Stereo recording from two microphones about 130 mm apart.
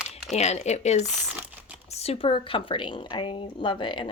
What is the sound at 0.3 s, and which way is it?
A woman's voice, 60° left (ahead or behind).